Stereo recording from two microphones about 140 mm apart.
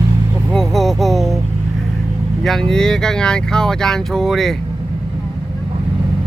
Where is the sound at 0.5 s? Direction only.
Centre (ahead or behind).